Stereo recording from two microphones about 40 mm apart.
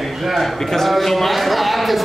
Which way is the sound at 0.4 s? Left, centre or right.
Centre.